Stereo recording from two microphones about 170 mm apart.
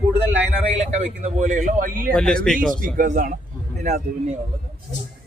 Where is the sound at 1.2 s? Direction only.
45° right (ahead or behind).